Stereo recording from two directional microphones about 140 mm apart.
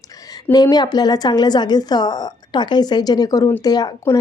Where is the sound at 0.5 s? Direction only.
30° left (ahead or behind).